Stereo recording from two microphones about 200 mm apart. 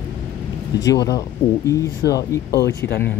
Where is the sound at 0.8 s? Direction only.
20° left (ahead or behind).